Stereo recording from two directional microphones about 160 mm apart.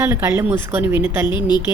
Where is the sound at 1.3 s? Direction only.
25° left (ahead or behind).